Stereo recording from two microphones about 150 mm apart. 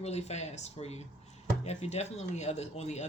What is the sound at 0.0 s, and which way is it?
Speech, 45° left (ahead or behind).